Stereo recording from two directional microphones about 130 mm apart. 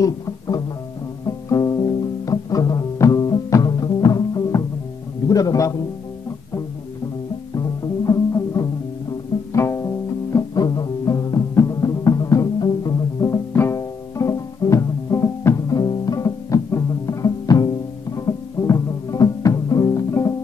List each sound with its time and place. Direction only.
1.2 s music: 25° left (ahead or behind)
5.3 s a man's voice: 25° left (ahead or behind)
7.5 s music: 25° left (ahead or behind)